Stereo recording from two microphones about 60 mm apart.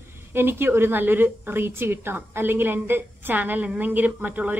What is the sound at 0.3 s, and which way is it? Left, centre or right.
A woman's voice, right.